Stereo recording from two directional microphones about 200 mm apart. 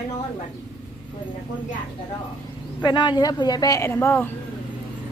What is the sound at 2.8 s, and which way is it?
A woman's voice, 20° left (ahead or behind).